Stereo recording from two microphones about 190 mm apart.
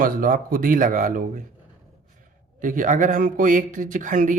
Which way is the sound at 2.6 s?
45° right (ahead or behind).